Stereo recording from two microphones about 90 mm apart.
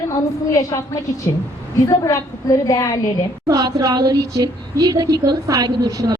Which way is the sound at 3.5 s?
45° right (ahead or behind).